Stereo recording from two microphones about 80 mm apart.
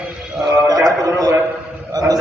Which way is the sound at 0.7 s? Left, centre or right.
Right.